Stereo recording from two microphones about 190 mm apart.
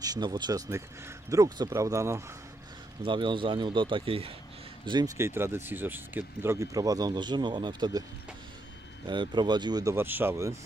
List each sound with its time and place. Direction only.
0.0 s speech: 20° right (ahead or behind)
3.0 s speech: 25° right (ahead or behind)
9.0 s speech: 25° right (ahead or behind)